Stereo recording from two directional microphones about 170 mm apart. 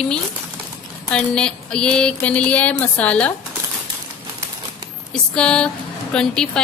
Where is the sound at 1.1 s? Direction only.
5° left (ahead or behind).